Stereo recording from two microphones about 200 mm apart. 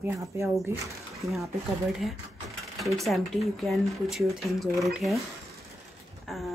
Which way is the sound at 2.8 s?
Centre (ahead or behind).